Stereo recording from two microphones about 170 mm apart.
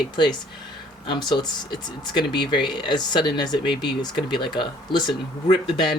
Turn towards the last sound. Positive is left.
turn(degrees=30)  # may be behind; listen again after turning